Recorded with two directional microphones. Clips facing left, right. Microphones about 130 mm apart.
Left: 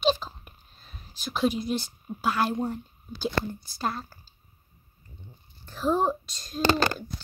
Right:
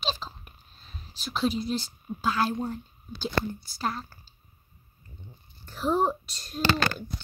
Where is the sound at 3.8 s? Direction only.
10° left (ahead or behind).